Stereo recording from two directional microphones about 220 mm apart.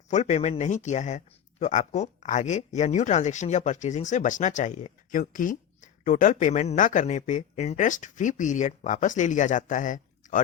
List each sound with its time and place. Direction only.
0.1 s speech: 35° left (ahead or behind)